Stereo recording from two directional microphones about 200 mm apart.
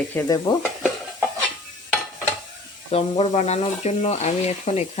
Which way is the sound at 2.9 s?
30° left (ahead or behind).